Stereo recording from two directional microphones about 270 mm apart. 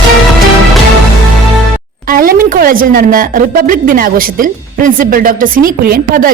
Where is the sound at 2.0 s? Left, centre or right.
Right.